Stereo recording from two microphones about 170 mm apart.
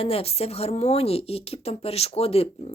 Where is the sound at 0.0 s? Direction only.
35° left (ahead or behind).